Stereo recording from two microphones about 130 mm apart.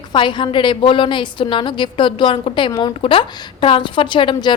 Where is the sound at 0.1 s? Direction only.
40° left (ahead or behind).